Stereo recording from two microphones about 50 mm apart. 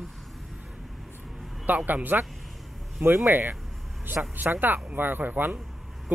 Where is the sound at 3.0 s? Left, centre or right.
Right.